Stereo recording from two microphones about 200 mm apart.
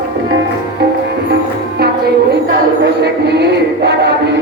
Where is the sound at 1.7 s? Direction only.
55° right (ahead or behind).